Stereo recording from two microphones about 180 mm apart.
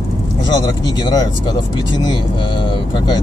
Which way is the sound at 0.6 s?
20° left (ahead or behind).